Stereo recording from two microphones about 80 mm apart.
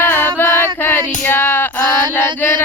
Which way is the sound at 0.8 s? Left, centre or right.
Left.